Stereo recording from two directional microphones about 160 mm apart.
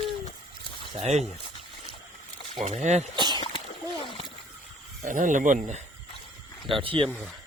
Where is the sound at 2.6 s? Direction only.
45° right (ahead or behind).